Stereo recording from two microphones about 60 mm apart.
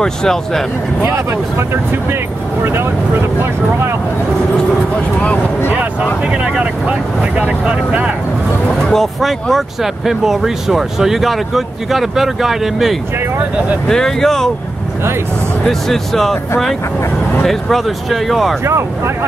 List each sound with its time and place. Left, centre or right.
0.0 s speech: centre
2.6 s speech: right
6.3 s speech: right
8.9 s speech: centre
13.8 s speech: centre
15.6 s speech: centre
18.7 s speech: right